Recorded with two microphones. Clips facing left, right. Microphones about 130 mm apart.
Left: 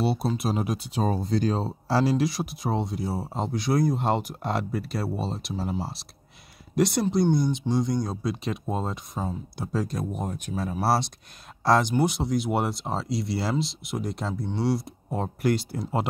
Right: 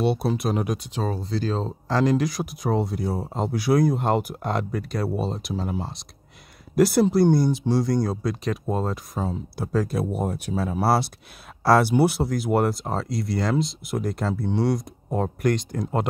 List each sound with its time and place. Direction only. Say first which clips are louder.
0.0 s speech: right 3 dB; centre (ahead or behind)
1.4 s speech: even; 10° left (ahead or behind); by 10.3 s 5° right (ahead or behind)
10.5 s speech: right 2 dB; 75° right (ahead or behind)
10.8 s speech: right 2 dB; centre (ahead or behind)